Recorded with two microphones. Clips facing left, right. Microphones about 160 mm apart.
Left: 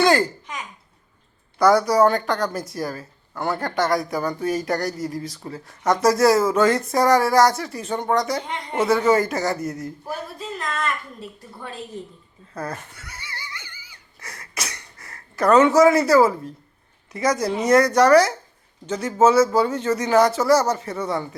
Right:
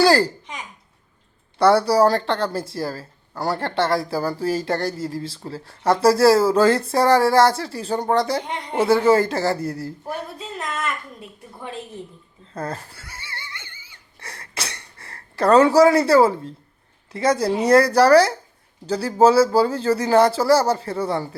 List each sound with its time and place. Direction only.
0.0 s babbling: 35° right (ahead or behind)
1.5 s a woman's voice: 30° right (ahead or behind)
12.5 s wheeze: 30° right (ahead or behind)
17.1 s a man's voice: 30° right (ahead or behind)